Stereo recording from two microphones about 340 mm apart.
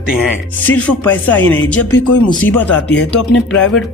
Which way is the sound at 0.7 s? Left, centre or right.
Centre.